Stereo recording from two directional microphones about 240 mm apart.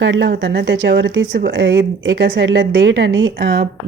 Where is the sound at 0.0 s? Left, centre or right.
Right.